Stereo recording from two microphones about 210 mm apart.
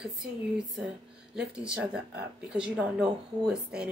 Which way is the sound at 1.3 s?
5° right (ahead or behind).